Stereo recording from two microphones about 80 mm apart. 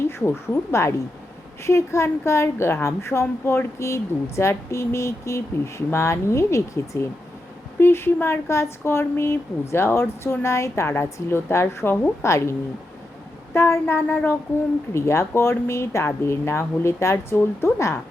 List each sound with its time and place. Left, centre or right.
0.0 s a woman's voice: left
13.5 s a sound: left
14.9 s a woman's voice: left